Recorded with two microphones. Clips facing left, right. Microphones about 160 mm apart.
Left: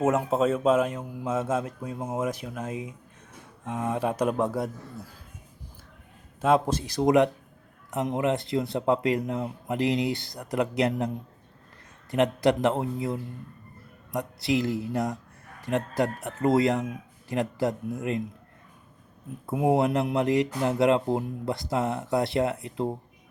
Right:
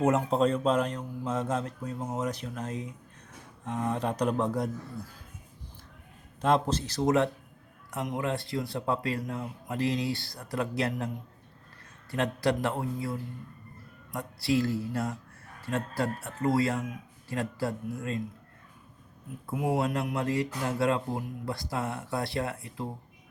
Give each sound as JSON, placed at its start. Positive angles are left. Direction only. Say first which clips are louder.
{"t": 0.0, "sound": "speech", "louder": "left 1 dB", "side_deg": 5}
{"t": 6.4, "sound": "speech", "louder": "left 3 dB", "side_deg": 10}
{"t": 12.1, "sound": "speech", "louder": "left 5 dB", "side_deg": 20}
{"t": 19.5, "sound": "speech", "louder": "left 6 dB", "side_deg": 25}